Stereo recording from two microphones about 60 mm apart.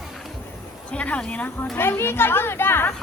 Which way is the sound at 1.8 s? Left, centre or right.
Left.